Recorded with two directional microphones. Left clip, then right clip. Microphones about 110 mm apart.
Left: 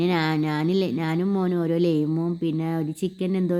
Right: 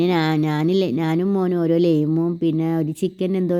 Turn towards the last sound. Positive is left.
turn(degrees=-35)  # may be behind; listen again after turning